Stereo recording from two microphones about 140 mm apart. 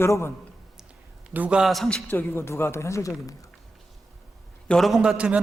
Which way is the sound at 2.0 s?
15° left (ahead or behind).